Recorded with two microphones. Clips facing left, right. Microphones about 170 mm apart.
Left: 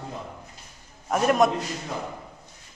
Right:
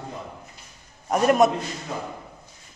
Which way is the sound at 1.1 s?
Centre (ahead or behind).